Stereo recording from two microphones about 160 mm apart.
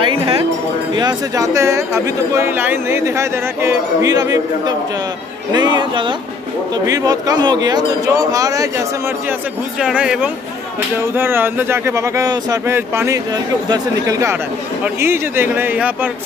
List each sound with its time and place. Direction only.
0.0 s a sound: 30° right (ahead or behind)
0.9 s speech: 25° right (ahead or behind)
9.8 s speech: 5° right (ahead or behind)